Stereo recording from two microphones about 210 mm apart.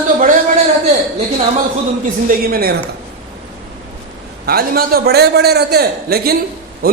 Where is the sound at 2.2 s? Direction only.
45° right (ahead or behind).